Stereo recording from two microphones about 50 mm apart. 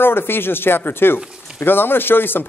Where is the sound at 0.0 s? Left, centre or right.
Left.